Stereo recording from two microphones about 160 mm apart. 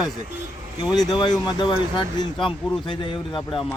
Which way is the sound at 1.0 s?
25° left (ahead or behind).